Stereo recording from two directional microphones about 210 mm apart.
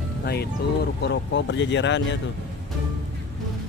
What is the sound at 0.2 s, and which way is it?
Speech, 50° left (ahead or behind).